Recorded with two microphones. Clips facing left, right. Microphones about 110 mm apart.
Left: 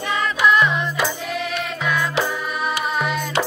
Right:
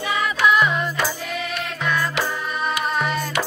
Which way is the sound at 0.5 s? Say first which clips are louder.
Left 1 dB; 5° right (ahead or behind).